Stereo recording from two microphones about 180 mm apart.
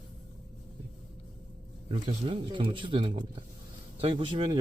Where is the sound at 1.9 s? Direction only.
30° right (ahead or behind).